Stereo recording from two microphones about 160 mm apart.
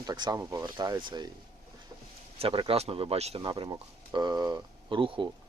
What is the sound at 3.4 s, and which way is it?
Speech, 25° right (ahead or behind).